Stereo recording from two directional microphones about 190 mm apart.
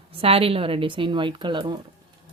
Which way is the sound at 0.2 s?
30° right (ahead or behind).